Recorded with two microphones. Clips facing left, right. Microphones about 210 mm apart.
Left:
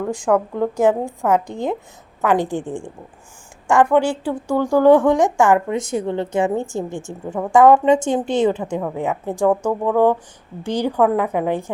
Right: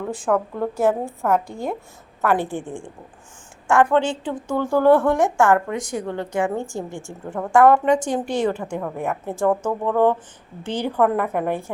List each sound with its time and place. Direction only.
0.5 s a woman's voice: 15° left (ahead or behind)